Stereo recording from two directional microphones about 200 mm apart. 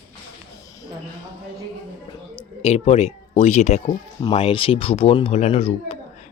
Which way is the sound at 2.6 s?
30° left (ahead or behind).